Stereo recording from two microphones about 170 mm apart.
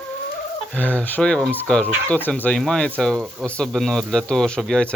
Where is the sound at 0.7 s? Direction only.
10° left (ahead or behind).